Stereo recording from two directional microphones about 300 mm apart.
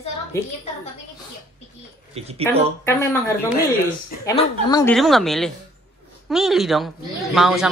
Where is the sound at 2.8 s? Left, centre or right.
Centre.